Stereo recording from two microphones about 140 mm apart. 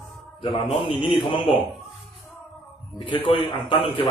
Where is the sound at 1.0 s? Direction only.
40° left (ahead or behind).